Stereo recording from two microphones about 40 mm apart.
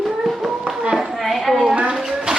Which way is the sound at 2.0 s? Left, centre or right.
Centre.